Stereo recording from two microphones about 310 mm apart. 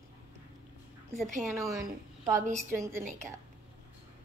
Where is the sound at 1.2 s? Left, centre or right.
Centre.